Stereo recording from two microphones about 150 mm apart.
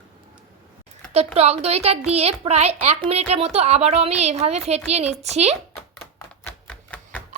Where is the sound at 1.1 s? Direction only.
45° right (ahead or behind).